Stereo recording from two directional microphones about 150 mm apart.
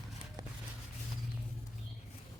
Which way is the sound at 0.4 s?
25° right (ahead or behind).